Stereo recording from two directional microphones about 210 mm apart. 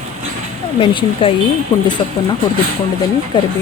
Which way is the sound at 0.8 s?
25° left (ahead or behind).